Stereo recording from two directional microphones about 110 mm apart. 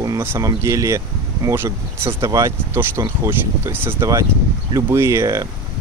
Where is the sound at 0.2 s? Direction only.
20° right (ahead or behind).